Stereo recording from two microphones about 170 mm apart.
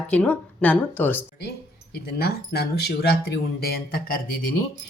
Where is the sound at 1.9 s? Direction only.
70° left (ahead or behind).